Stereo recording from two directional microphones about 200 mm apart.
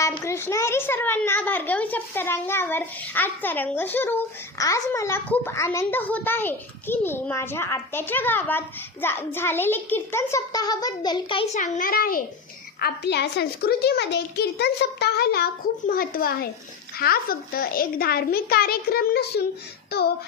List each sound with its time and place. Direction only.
0.3 s a child's voice: 15° left (ahead or behind); by 20.1 s 50° left (ahead or behind)